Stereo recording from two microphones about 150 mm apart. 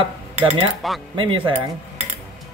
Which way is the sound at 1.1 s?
35° right (ahead or behind).